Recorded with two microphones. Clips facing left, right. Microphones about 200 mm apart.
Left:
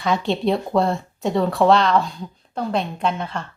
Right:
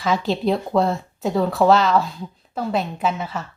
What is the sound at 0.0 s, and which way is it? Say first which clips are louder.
Speech: even; centre (ahead or behind).